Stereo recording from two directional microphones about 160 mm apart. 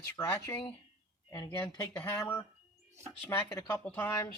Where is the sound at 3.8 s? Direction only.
15° left (ahead or behind).